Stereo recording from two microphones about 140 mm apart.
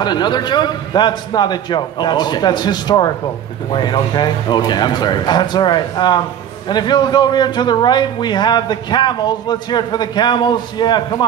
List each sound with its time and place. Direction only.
0.0 s a man's voice: 30° left (ahead or behind)